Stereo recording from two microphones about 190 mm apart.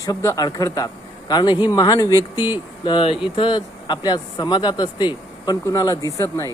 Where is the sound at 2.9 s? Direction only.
25° left (ahead or behind).